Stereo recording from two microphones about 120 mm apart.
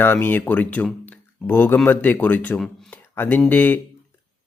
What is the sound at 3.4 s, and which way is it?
Speech, 15° left (ahead or behind).